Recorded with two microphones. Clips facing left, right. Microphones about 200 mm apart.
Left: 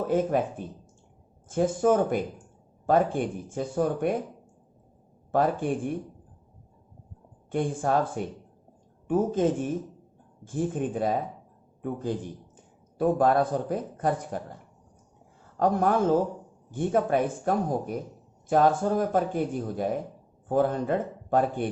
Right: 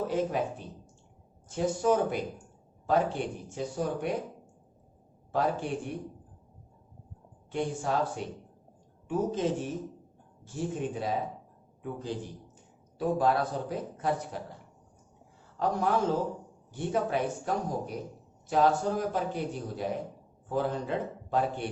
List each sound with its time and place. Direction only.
0.1 s a man's voice: 50° left (ahead or behind)
5.3 s a man's voice: 50° left (ahead or behind)
7.5 s a man's voice: 50° left (ahead or behind)
13.0 s a man's voice: 50° left (ahead or behind)
15.5 s a man's voice: 50° left (ahead or behind)